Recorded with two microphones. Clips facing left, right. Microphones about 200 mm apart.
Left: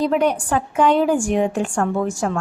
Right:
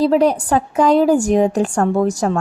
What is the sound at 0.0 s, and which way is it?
Speech, 35° right (ahead or behind).